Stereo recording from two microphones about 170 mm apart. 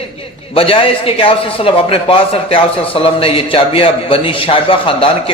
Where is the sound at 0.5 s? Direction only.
35° left (ahead or behind).